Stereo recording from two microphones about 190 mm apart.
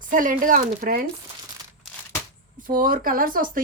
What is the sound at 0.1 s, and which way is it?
Speech, 45° right (ahead or behind).